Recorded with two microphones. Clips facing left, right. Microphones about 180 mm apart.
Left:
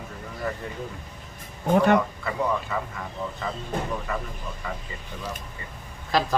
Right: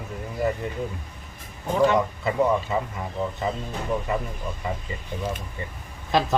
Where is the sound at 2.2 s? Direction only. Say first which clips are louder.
Right 5 dB; 20° right (ahead or behind).